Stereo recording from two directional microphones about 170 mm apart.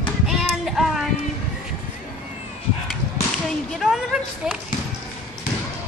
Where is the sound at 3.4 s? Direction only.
Centre (ahead or behind).